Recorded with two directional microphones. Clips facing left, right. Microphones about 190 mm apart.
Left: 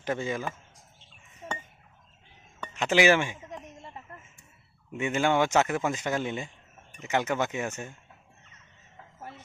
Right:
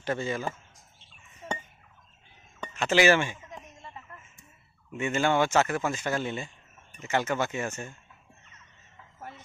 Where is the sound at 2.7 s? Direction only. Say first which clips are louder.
Even; 15° left (ahead or behind).